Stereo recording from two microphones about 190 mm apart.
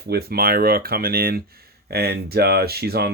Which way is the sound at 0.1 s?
55° right (ahead or behind).